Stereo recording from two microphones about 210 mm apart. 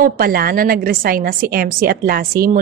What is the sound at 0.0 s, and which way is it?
A woman's voice, 45° right (ahead or behind).